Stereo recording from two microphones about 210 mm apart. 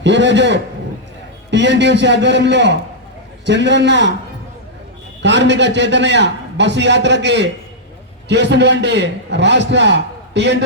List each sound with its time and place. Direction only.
0.0 s a man's voice: 60° right (ahead or behind)
5.2 s a man's voice: 55° right (ahead or behind)